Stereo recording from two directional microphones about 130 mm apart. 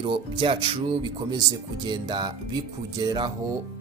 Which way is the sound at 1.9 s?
35° right (ahead or behind).